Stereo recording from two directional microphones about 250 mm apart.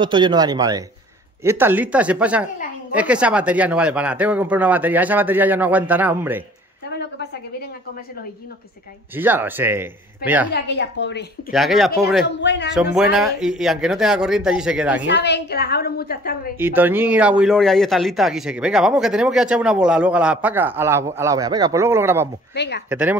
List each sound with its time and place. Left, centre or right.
0.0 s speech: centre
9.1 s speech: centre
10.5 s a woman's voice: left
11.5 s speech: centre
12.3 s a woman's voice: left
12.7 s speech: centre
15.0 s a woman's voice: left
16.5 s speech: centre
22.5 s a woman's voice: left
22.8 s speech: centre